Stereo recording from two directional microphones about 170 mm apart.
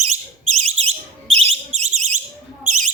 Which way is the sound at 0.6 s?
35° right (ahead or behind).